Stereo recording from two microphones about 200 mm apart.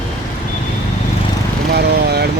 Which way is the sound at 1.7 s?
55° right (ahead or behind).